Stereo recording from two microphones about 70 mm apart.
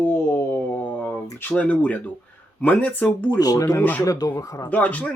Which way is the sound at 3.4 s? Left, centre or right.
Left.